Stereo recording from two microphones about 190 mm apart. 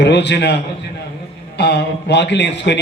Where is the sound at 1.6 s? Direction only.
60° left (ahead or behind).